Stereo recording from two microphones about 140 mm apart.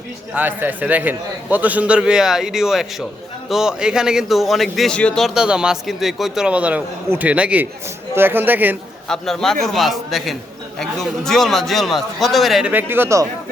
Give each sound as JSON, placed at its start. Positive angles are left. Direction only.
{"t": 0.3, "sound": "a man's voice", "side_deg": -10}
{"t": 9.0, "sound": "a man's voice", "side_deg": 5}
{"t": 12.7, "sound": "a man's voice", "side_deg": -15}